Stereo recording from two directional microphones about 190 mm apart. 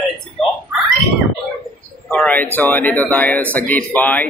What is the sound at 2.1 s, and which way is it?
Speech, 5° left (ahead or behind).